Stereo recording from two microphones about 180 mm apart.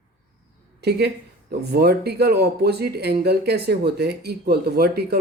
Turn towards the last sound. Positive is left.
turn(degrees=-65)  # may be behind; listen again after turning